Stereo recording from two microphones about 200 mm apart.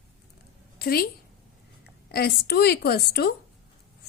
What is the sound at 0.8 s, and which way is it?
Speech, 50° left (ahead or behind).